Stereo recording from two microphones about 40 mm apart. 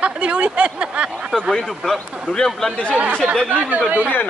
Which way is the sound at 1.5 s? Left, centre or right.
Centre.